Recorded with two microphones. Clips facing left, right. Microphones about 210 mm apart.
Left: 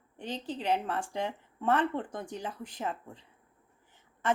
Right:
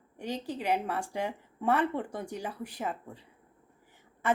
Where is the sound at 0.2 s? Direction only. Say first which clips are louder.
Right 2 dB; 10° right (ahead or behind).